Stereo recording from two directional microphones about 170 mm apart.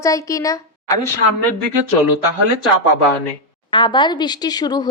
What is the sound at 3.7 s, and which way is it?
A woman's voice, 25° left (ahead or behind).